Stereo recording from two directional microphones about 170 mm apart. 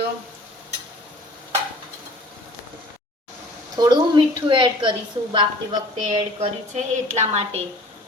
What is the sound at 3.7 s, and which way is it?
A woman's voice, 25° right (ahead or behind).